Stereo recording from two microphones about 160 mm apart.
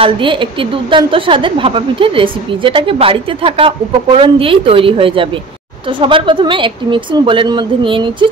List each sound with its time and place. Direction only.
0.0 s a woman's voice: 30° right (ahead or behind)